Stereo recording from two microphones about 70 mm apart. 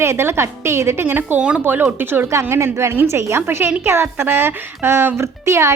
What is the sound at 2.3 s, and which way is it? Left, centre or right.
A woman's voice, right.